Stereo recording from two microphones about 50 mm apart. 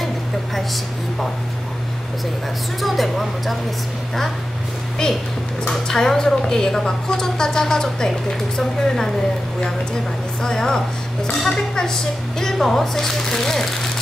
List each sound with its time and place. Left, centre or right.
2.8 s a woman's voice: centre
5.7 s a woman's voice: centre
10.4 s a woman's voice: centre